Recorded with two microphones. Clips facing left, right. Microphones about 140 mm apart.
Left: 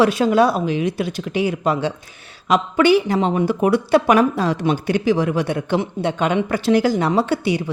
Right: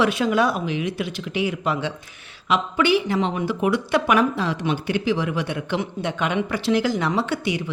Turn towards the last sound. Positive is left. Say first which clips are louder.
# left 5 dB
turn(degrees=35)  # may be behind; listen again after turning